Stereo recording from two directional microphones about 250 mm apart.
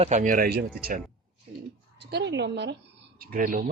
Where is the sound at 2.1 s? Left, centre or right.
Right.